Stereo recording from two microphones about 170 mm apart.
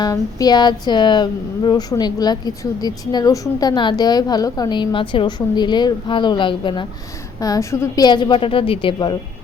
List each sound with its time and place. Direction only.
0.0 s speech: 20° left (ahead or behind)